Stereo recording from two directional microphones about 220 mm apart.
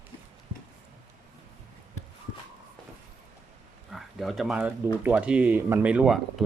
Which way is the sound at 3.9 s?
Centre (ahead or behind).